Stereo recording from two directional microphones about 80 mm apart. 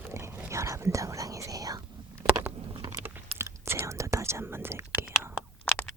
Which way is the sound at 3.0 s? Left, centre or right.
Right.